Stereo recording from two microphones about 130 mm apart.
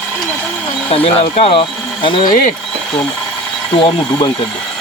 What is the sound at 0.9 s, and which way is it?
Speech, 45° left (ahead or behind).